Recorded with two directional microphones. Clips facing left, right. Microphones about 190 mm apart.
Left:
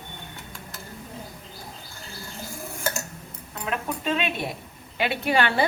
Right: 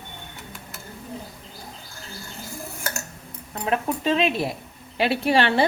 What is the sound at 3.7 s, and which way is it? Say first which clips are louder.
A woman's voice: right 5 dB; 30° right (ahead or behind).